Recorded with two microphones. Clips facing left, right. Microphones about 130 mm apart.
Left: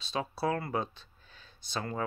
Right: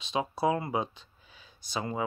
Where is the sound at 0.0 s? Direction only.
15° right (ahead or behind).